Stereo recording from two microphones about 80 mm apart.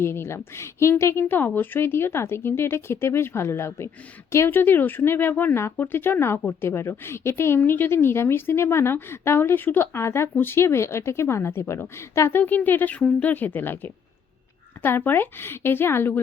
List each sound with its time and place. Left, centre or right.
0.0 s a woman's voice: left; by 13.3 s centre
13.3 s a woman's voice: left